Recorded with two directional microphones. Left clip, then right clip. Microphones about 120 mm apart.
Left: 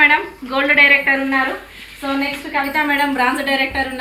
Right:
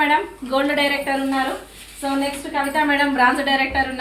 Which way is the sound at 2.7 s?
20° right (ahead or behind).